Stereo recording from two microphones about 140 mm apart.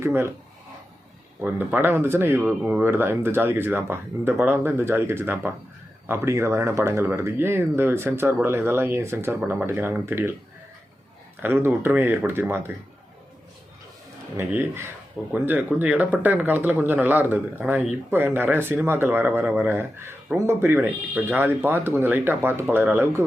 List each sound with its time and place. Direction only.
0.0 s speech: 15° right (ahead or behind)
1.4 s speech: 15° right (ahead or behind)
11.4 s speech: 15° right (ahead or behind)
14.3 s speech: 15° right (ahead or behind)